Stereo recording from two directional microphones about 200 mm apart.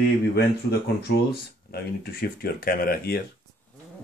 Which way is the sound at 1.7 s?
50° left (ahead or behind).